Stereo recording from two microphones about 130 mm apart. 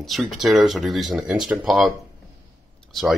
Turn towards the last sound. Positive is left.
turn(degrees=0)  # may be behind; listen again after turning